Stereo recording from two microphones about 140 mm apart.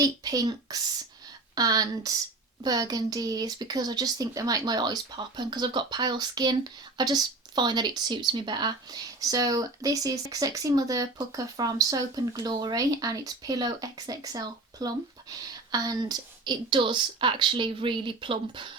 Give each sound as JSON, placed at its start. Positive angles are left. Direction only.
{"t": 0.0, "sound": "speech", "side_deg": -25}